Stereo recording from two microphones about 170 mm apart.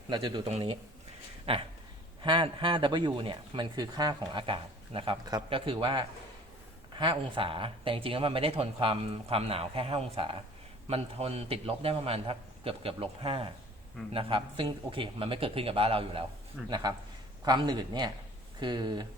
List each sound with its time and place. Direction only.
0.1 s speech: 25° right (ahead or behind)